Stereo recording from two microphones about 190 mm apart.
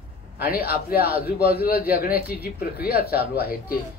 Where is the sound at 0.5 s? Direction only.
55° left (ahead or behind).